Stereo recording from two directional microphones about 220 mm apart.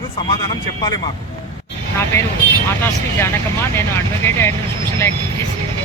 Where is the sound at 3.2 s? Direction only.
10° left (ahead or behind).